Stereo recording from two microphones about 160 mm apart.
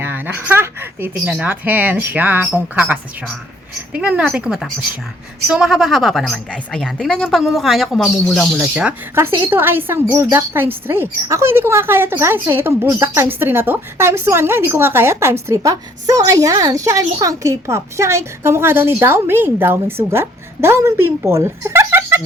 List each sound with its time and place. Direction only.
0.0 s a woman's voice: 10° right (ahead or behind)